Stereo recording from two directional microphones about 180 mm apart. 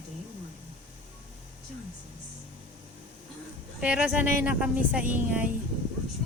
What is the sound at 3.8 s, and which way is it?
A woman's voice, 5° right (ahead or behind).